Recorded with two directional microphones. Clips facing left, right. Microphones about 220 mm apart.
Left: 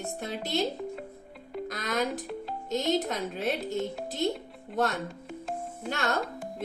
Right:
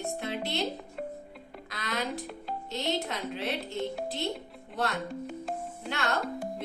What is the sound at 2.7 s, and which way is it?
A woman's voice, 45° left (ahead or behind).